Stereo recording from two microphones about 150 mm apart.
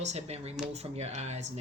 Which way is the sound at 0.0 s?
45° right (ahead or behind).